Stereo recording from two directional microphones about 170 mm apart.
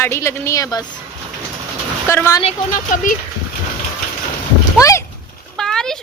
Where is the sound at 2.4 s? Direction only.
50° left (ahead or behind).